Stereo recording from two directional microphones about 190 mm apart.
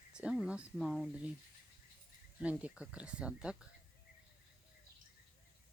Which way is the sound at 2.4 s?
5° right (ahead or behind).